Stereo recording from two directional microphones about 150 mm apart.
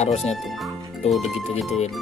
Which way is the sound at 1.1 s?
Centre (ahead or behind).